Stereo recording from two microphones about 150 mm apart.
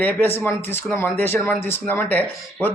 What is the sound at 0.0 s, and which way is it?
Speech, 15° left (ahead or behind).